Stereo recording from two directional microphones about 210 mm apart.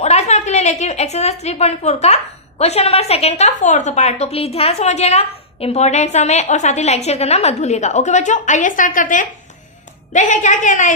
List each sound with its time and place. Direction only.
0.0 s a woman's voice: 30° left (ahead or behind)